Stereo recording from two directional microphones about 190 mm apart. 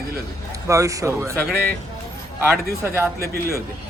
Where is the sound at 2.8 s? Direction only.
15° right (ahead or behind).